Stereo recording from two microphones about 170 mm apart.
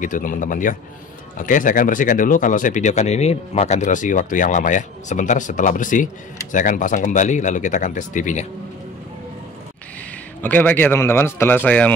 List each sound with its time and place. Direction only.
0.0 s speech: 50° left (ahead or behind)
10.4 s speech: 10° left (ahead or behind)